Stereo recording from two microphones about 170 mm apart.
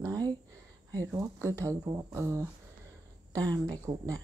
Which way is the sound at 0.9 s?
20° right (ahead or behind).